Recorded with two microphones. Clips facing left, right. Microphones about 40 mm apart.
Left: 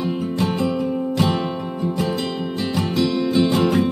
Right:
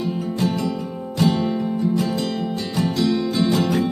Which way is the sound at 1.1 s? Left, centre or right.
Left.